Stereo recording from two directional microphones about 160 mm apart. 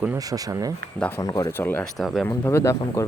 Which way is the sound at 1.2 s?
20° left (ahead or behind).